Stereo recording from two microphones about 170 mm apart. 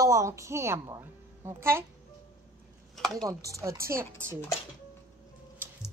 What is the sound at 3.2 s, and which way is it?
A woman's voice, 20° right (ahead or behind).